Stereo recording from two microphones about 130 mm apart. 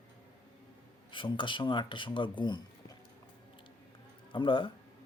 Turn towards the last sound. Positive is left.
turn(degrees=40)  # may be behind; listen again after turning